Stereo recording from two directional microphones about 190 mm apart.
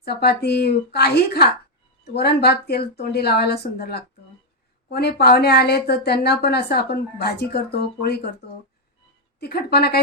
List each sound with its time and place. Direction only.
0.0 s a woman's voice: 55° left (ahead or behind)